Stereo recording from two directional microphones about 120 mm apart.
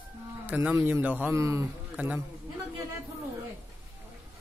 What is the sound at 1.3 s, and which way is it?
Speech, 25° right (ahead or behind).